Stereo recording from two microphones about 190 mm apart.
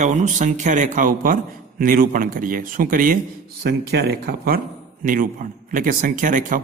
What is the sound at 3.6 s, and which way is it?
A man's voice, 55° right (ahead or behind).